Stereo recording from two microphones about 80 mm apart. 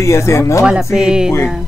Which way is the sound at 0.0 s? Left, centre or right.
Left.